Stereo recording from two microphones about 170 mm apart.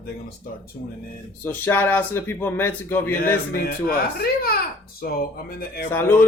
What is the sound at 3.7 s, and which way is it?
Speech, 65° left (ahead or behind).